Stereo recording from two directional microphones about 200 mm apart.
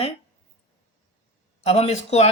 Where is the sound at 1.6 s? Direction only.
30° left (ahead or behind).